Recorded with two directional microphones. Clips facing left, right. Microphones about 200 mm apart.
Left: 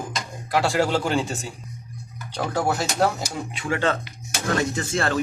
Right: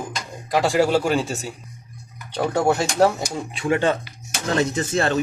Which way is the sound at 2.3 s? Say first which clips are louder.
Right 4 dB; 25° right (ahead or behind).